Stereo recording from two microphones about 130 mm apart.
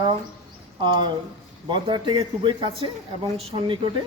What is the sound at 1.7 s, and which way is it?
A man's voice, 40° right (ahead or behind).